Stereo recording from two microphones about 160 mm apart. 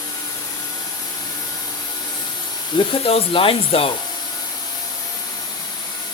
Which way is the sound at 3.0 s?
35° left (ahead or behind).